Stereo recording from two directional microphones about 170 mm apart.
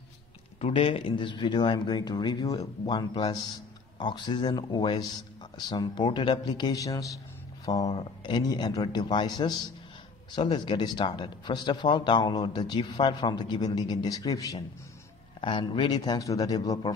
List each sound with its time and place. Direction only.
0.6 s speech: 35° left (ahead or behind)
10.6 s speech: 25° left (ahead or behind)